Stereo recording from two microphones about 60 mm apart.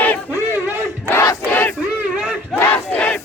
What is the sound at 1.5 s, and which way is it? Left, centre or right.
Battle cry, left.